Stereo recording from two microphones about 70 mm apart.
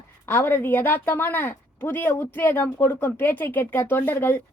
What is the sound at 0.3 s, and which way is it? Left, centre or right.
A woman's voice, left.